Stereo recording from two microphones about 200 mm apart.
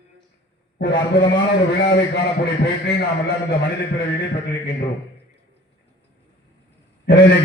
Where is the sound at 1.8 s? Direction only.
60° left (ahead or behind).